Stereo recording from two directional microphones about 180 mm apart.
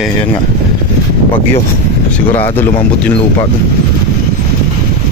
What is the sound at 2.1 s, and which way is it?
Speech, 10° left (ahead or behind).